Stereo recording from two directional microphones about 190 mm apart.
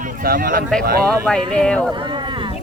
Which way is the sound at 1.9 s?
25° right (ahead or behind).